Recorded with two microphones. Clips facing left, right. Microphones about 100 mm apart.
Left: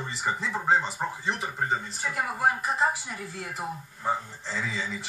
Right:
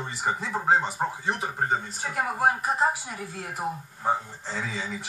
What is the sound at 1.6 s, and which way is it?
Speech, 25° right (ahead or behind).